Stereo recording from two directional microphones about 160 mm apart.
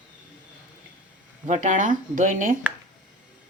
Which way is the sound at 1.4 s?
50° right (ahead or behind).